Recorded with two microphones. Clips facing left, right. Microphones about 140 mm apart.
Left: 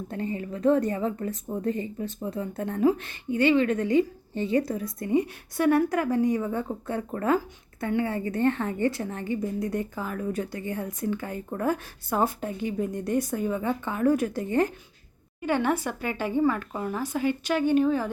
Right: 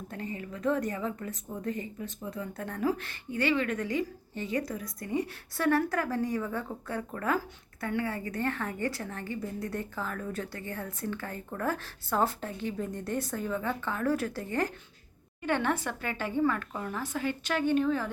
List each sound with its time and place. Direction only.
0.1 s a woman's voice: 30° left (ahead or behind)
15.4 s speech: 10° left (ahead or behind)